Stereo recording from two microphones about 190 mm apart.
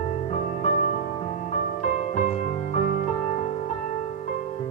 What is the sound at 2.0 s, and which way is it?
Music, 40° left (ahead or behind).